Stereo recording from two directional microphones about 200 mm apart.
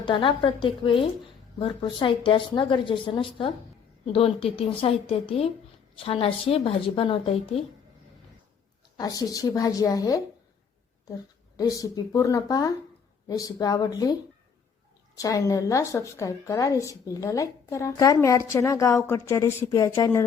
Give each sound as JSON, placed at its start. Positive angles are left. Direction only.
{"t": 0.0, "sound": "a woman's voice", "side_deg": 25}
{"t": 9.0, "sound": "a woman's voice", "side_deg": 15}
{"t": 11.5, "sound": "a woman's voice", "side_deg": 20}